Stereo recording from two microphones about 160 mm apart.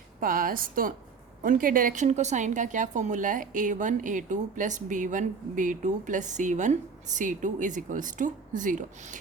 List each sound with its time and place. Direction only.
0.2 s a woman's voice: 60° right (ahead or behind)